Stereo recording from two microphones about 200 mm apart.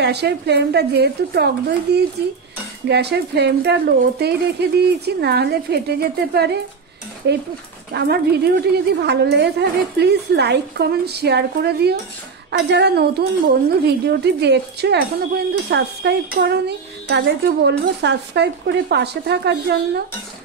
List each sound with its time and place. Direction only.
0.0 s speech: 55° right (ahead or behind)